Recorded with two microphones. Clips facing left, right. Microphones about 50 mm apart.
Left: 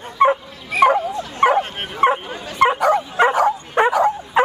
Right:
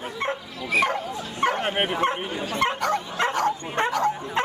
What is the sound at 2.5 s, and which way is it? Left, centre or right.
Dog, centre.